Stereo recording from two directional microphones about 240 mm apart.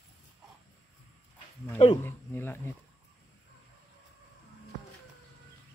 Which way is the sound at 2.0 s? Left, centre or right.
Centre.